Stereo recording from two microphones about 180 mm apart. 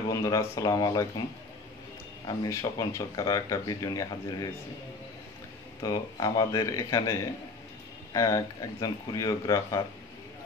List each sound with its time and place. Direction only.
0.1 s speech: 20° left (ahead or behind)
2.2 s speech: 20° left (ahead or behind)
5.8 s speech: 20° left (ahead or behind)